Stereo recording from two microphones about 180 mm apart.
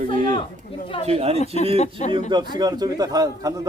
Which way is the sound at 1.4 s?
35° left (ahead or behind).